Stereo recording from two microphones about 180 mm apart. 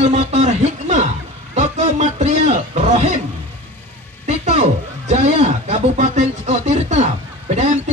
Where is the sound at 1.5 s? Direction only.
40° right (ahead or behind).